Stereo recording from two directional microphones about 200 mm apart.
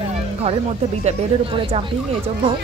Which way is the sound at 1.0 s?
30° right (ahead or behind).